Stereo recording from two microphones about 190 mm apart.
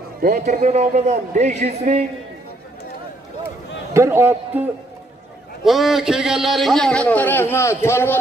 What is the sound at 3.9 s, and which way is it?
Speech, 15° right (ahead or behind).